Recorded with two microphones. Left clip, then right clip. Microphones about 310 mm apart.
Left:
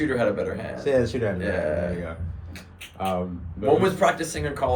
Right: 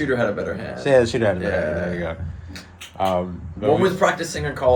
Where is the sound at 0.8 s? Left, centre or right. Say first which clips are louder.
Right 6 dB; right.